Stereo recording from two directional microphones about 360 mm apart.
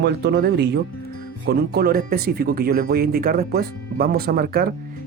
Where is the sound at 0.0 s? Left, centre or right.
Right.